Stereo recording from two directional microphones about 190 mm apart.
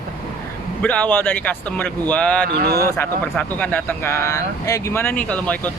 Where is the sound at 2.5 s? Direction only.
55° right (ahead or behind).